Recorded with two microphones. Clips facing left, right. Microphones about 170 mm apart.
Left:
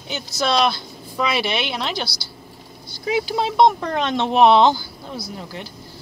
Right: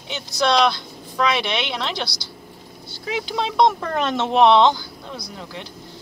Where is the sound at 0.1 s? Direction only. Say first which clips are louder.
Right 1 dB; centre (ahead or behind).